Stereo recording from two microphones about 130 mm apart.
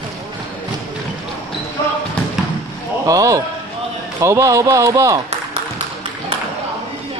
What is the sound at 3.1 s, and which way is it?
Speech, 25° right (ahead or behind).